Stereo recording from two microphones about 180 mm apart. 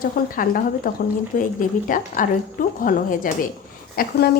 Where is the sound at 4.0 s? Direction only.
60° left (ahead or behind).